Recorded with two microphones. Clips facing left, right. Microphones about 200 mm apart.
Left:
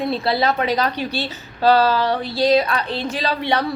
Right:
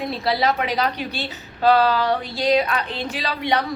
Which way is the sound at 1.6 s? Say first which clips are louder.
Left 1 dB; 35° left (ahead or behind).